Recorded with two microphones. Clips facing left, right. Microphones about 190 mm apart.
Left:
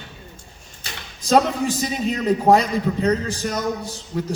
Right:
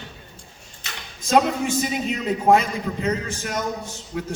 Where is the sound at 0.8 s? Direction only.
35° left (ahead or behind).